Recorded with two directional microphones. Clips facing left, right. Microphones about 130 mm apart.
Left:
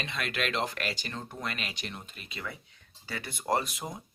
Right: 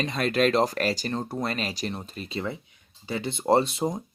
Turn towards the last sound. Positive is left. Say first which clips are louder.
# right 8 dB
turn(degrees=-35)  # may be behind; listen again after turning